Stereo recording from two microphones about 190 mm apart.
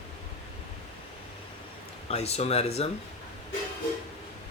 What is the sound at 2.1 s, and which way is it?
Speech, 35° left (ahead or behind).